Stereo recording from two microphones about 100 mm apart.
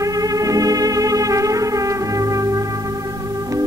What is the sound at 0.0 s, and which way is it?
Music, 35° right (ahead or behind).